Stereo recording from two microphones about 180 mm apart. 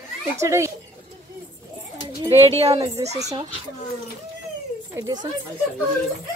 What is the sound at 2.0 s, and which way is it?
Speech, 30° right (ahead or behind).